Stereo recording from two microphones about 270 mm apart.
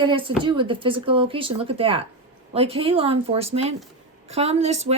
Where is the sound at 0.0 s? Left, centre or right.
Centre.